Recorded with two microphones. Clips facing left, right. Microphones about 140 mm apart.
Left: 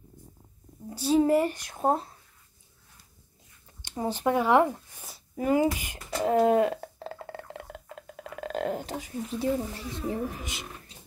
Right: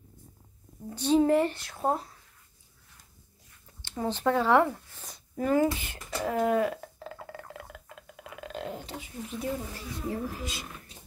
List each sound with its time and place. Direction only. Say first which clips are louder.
0.8 s speech: even; 10° left (ahead or behind); by 2.0 s 25° left (ahead or behind)
3.8 s speech: even; 15° left (ahead or behind)
5.0 s speech: left 1 dB; 5° left (ahead or behind)
6.0 s a sound: left 5 dB; 30° left (ahead or behind)
9.9 s speech: left 2 dB; 20° left (ahead or behind)